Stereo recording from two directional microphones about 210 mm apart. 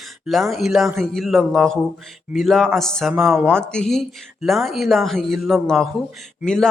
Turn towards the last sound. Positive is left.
turn(degrees=5)  # may be behind; listen again after turning